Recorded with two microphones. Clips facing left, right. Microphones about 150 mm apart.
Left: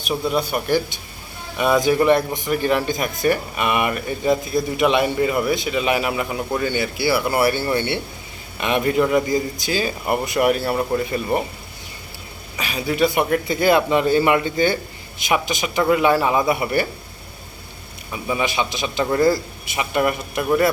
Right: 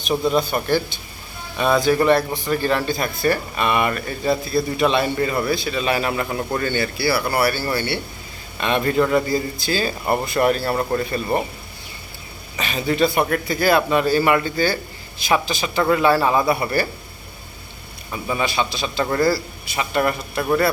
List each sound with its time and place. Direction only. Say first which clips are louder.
0.0 s speech: right 2 dB; 5° left (ahead or behind)
12.5 s a man's voice: right 1 dB; 10° left (ahead or behind)
18.1 s speech: even; 10° left (ahead or behind)